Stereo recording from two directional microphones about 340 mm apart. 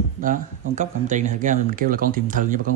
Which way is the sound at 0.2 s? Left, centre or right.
Right.